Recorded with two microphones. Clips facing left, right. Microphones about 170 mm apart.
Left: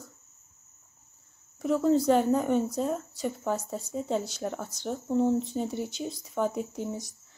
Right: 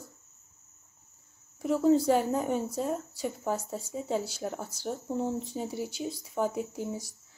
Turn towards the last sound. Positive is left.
turn(degrees=-10)  # may be behind; listen again after turning